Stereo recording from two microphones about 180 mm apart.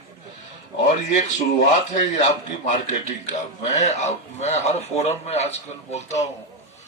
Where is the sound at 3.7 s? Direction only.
40° left (ahead or behind).